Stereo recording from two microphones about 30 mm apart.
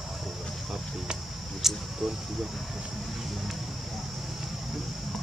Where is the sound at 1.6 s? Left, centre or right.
Centre.